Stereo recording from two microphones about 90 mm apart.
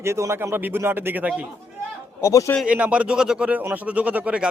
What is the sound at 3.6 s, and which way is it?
Speech, 20° right (ahead or behind).